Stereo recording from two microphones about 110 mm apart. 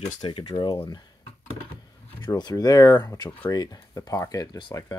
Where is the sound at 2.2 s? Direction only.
40° left (ahead or behind).